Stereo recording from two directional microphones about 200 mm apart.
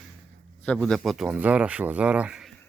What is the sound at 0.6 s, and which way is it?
Speech, 5° left (ahead or behind).